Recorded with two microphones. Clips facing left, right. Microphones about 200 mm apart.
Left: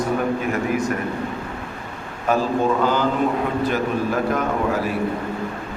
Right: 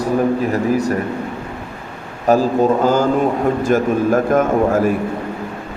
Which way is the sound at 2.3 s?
40° right (ahead or behind).